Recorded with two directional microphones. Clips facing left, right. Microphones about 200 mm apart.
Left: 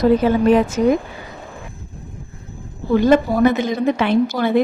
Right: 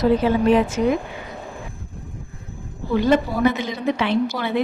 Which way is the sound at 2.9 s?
45° left (ahead or behind).